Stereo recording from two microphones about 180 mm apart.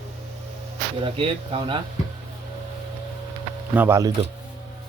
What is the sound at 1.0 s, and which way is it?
Speech, 30° right (ahead or behind).